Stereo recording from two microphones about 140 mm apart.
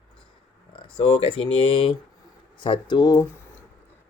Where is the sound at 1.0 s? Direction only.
40° left (ahead or behind).